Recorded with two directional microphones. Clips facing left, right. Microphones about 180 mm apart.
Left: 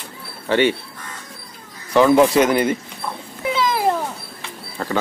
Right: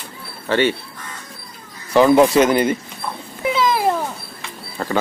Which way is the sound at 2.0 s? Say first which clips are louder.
Right 1 dB; 25° right (ahead or behind).